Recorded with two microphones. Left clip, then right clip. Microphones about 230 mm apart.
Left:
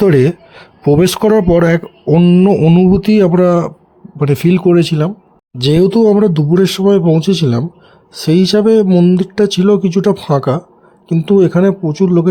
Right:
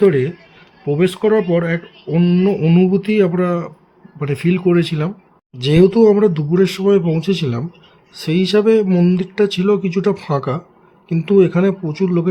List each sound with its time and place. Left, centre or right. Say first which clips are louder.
0.0 s speech: left 4 dB; left